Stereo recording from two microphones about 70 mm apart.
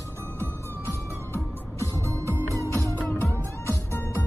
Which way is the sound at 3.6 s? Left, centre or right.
Left.